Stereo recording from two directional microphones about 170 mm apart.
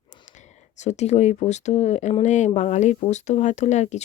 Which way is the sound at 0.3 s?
45° left (ahead or behind).